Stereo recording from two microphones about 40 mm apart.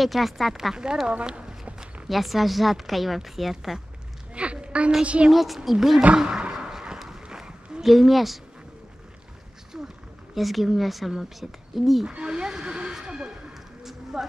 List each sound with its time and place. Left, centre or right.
0.0 s speech: centre
1.0 s speech: right
2.0 s speech: centre
4.3 s a sound: right
5.0 s a woman's voice: right
5.3 s speech: centre
6.1 s speech: right
6.5 s a sound: centre
7.8 s speech: centre
9.7 s wild animals: centre
10.3 s speech: centre
12.1 s speech: right
12.9 s a sound: centre